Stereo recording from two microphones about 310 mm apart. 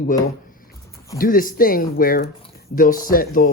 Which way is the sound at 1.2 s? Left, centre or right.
Left.